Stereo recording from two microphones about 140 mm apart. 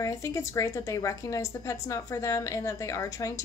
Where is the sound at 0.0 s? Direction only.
20° left (ahead or behind).